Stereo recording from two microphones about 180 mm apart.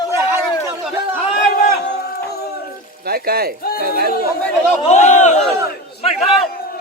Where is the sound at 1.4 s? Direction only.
50° left (ahead or behind).